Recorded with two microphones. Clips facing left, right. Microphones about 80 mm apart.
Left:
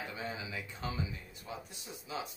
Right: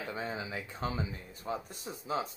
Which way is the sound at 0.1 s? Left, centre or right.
Right.